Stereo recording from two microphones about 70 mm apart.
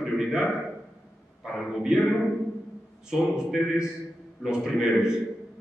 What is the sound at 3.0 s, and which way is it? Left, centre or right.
A man's voice, centre.